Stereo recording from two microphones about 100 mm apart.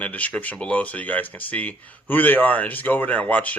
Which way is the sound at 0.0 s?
15° left (ahead or behind).